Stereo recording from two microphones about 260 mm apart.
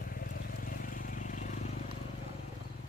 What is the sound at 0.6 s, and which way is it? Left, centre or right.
Vehicle, left.